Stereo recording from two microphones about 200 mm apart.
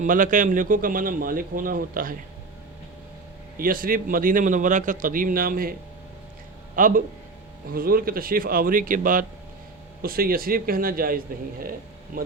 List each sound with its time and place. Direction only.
0.0 s a man's voice: 40° right (ahead or behind)
3.6 s a man's voice: 45° right (ahead or behind)
6.7 s a man's voice: 40° right (ahead or behind)